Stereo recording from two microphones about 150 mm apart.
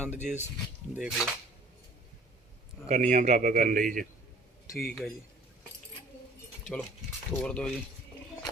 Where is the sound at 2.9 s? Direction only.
55° right (ahead or behind).